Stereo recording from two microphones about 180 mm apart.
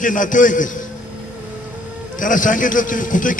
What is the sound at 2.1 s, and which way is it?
A man's voice, 45° left (ahead or behind).